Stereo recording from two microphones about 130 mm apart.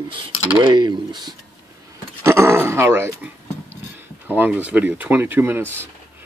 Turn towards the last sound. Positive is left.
turn(degrees=-15)  # may be behind; listen again after turning